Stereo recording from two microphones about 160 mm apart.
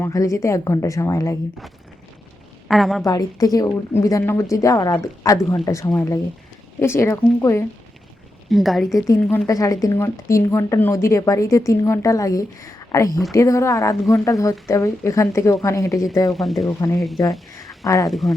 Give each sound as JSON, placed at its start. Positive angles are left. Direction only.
{"t": 0.0, "sound": "speech", "side_deg": 20}
{"t": 2.6, "sound": "a woman's voice", "side_deg": 0}
{"t": 3.0, "sound": "speech", "side_deg": 25}
{"t": 8.4, "sound": "speech", "side_deg": 0}
{"t": 9.5, "sound": "speech", "side_deg": 20}
{"t": 16.3, "sound": "speech", "side_deg": 0}
{"t": 16.6, "sound": "speech", "side_deg": 15}
{"t": 18.1, "sound": "speech", "side_deg": 0}